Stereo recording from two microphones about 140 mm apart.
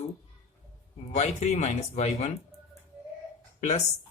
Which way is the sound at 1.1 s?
50° left (ahead or behind).